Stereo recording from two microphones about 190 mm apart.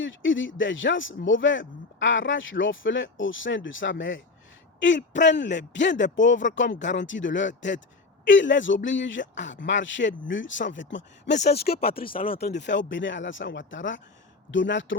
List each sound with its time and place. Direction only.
0.0 s speech: 80° left